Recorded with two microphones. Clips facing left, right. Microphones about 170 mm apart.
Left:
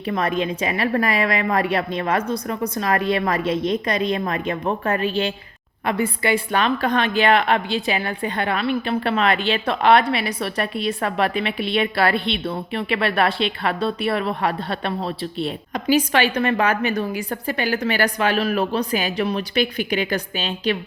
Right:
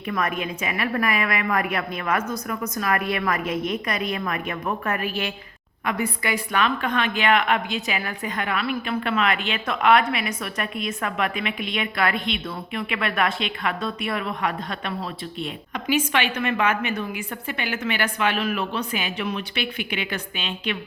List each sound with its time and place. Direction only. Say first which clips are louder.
0.0 s a woman's voice: left 4 dB; 30° left (ahead or behind)